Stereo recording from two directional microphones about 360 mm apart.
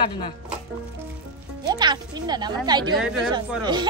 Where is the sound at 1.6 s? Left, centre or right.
Centre.